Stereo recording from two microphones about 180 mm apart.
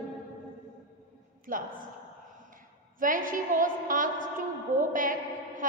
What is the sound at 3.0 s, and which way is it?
A woman's voice, 50° right (ahead or behind).